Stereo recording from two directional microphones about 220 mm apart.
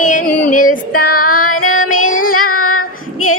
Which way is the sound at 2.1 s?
70° left (ahead or behind).